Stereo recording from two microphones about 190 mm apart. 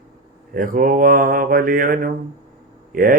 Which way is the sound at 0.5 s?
50° right (ahead or behind).